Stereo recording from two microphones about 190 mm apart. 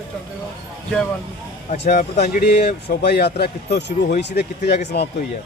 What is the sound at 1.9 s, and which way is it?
Speech, 50° left (ahead or behind).